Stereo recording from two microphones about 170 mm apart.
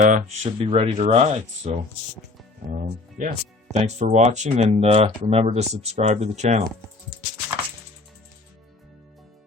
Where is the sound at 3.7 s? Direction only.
40° right (ahead or behind).